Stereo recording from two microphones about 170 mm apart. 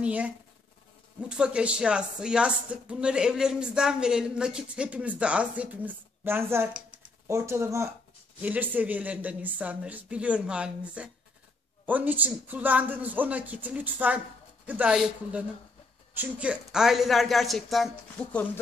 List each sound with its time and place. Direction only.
0.0 s a man's voice: 5° right (ahead or behind)
1.3 s a man's voice: 5° right (ahead or behind)